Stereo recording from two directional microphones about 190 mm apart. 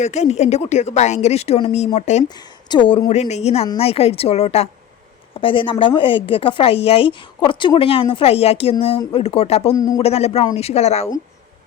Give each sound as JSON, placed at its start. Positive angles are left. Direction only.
{"t": 0.0, "sound": "speech", "side_deg": 35}
{"t": 2.6, "sound": "a woman's voice", "side_deg": 25}
{"t": 9.7, "sound": "a man's voice", "side_deg": 20}
{"t": 10.0, "sound": "speech", "side_deg": 35}